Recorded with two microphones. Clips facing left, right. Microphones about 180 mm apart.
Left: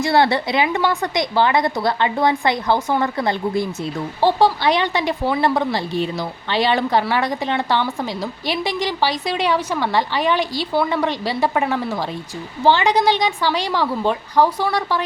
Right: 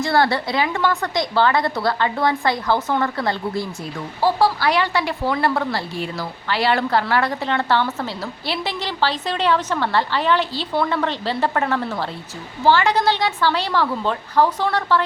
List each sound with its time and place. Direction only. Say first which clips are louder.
0.0 s a woman's voice: left 2 dB; 20° left (ahead or behind)